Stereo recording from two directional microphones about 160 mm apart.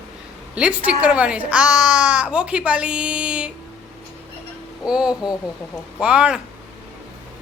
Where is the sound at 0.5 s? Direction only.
5° right (ahead or behind).